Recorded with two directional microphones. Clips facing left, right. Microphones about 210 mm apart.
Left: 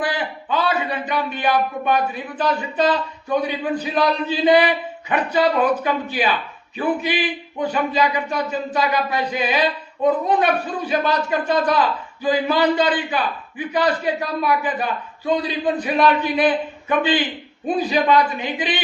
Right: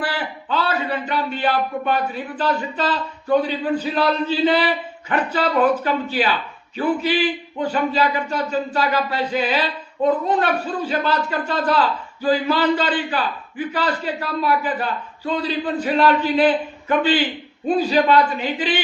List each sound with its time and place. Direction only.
0.0 s a man's voice: 15° left (ahead or behind)